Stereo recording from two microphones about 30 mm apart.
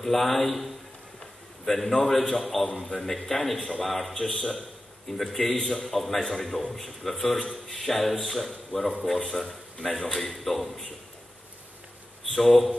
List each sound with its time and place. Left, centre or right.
0.0 s speech: centre
1.7 s a man's voice: centre
12.3 s speech: centre